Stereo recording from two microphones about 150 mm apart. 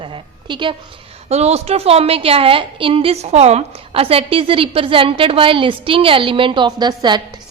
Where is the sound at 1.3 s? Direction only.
45° right (ahead or behind).